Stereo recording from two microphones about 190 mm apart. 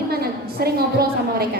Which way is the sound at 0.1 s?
55° right (ahead or behind).